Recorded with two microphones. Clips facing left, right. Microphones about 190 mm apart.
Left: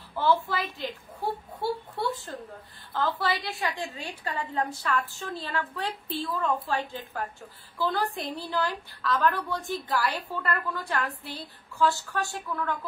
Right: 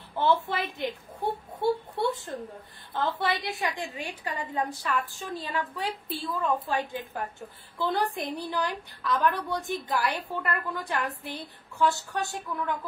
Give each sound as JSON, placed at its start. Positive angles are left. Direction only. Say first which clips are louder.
{"t": 0.1, "sound": "a woman's voice", "louder": "even", "side_deg": -20}